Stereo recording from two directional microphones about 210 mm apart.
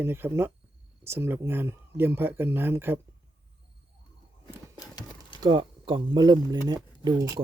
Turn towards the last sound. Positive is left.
turn(degrees=-20)  # may be behind; listen again after turning